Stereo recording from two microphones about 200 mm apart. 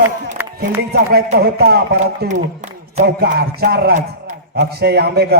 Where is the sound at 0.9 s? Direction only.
55° right (ahead or behind).